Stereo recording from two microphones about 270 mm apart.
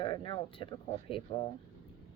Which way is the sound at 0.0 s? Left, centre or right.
Centre.